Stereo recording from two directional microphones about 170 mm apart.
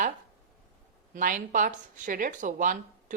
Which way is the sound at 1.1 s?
50° right (ahead or behind).